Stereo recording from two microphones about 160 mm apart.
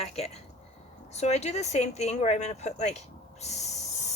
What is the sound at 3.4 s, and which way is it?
Snort, 45° left (ahead or behind).